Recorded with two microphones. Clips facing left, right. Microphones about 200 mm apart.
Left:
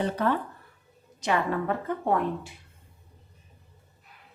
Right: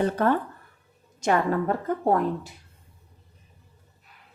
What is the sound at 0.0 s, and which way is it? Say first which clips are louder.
Speech: right 4 dB; 50° right (ahead or behind).